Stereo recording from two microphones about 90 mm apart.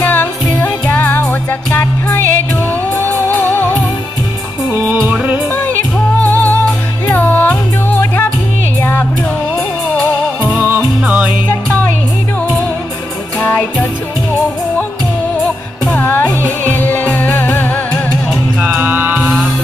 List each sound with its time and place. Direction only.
0.0 s music: 20° left (ahead or behind)
4.7 s music: 25° right (ahead or behind)
5.1 s music: 10° right (ahead or behind)
6.2 s music: 20° left (ahead or behind)
10.5 s music: 20° right (ahead or behind)
13.4 s music: 20° left (ahead or behind)
15.9 s music: 25° left (ahead or behind)
18.8 s music: 20° right (ahead or behind)